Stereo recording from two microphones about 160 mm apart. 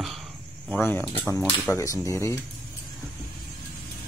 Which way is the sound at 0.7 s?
10° left (ahead or behind).